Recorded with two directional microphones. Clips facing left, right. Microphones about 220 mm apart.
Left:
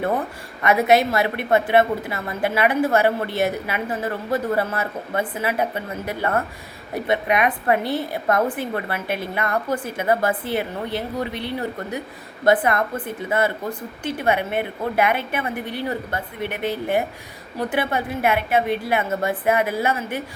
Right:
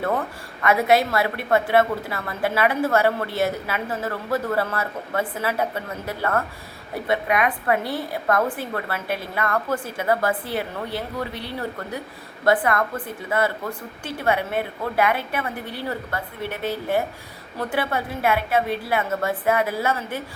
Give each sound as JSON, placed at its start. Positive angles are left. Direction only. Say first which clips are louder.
{"t": 0.6, "sound": "a woman's voice", "louder": "left 2 dB", "side_deg": 20}
{"t": 12.5, "sound": "a woman's voice", "louder": "left 2 dB", "side_deg": 20}
{"t": 14.0, "sound": "a woman's voice", "louder": "left 2 dB", "side_deg": 20}